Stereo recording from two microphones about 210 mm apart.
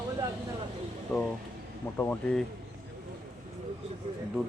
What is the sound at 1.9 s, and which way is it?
Speech, 10° left (ahead or behind).